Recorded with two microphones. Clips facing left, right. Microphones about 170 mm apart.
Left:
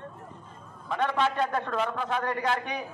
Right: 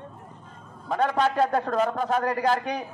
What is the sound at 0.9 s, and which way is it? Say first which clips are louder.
A man's voice: right 4 dB; 40° right (ahead or behind).